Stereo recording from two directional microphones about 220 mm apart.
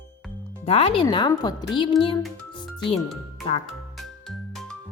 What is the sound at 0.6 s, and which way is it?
Speech, 25° left (ahead or behind).